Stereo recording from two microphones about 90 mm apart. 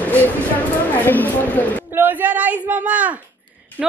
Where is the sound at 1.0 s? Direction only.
20° left (ahead or behind).